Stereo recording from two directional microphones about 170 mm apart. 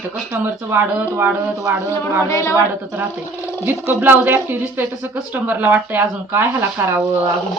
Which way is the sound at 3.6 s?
10° right (ahead or behind).